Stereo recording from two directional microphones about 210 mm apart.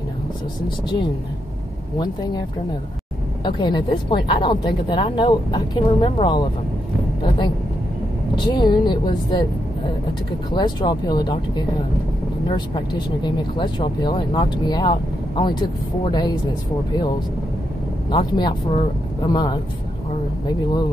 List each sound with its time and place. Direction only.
2.0 s speech: 20° left (ahead or behind)
3.4 s speech: 20° left (ahead or behind)
8.5 s speech: 20° left (ahead or behind)
10.5 s speech: 20° left (ahead or behind)
18.1 s speech: 20° left (ahead or behind)